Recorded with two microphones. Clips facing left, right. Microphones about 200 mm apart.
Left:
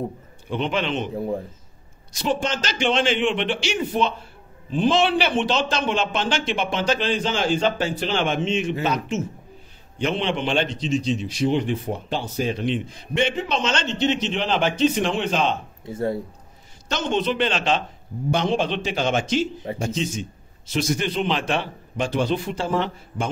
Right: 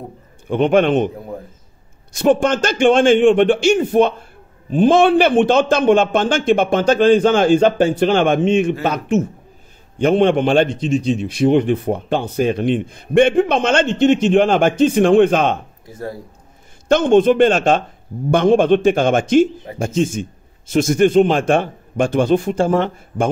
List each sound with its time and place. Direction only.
0.5 s a man's voice: 50° right (ahead or behind)
2.1 s a man's voice: 55° right (ahead or behind)
15.8 s speech: 25° left (ahead or behind)
16.9 s a man's voice: 50° right (ahead or behind)